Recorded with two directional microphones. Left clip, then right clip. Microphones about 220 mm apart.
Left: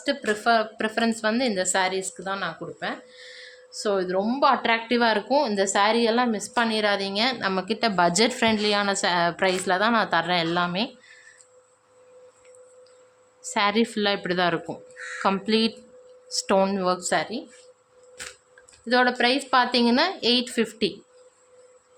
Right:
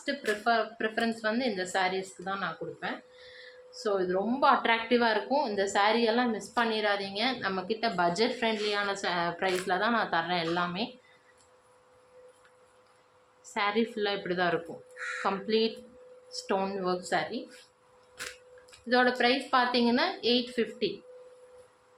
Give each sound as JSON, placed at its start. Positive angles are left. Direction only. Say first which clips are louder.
{"t": 0.4, "sound": "a woman's voice", "louder": "left 6 dB", "side_deg": 55}
{"t": 13.4, "sound": "speech", "louder": "left 6 dB", "side_deg": 45}
{"t": 18.9, "sound": "speech", "louder": "left 4 dB", "side_deg": 50}